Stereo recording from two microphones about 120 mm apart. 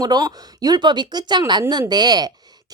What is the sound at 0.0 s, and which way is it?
A woman's voice, 35° right (ahead or behind).